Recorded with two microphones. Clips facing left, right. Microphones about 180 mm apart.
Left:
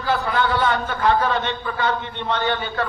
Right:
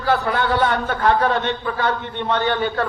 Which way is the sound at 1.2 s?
50° right (ahead or behind).